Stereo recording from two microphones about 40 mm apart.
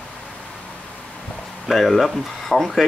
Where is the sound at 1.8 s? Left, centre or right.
Centre.